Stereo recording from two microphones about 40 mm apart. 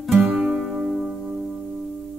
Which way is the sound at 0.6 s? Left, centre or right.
Centre.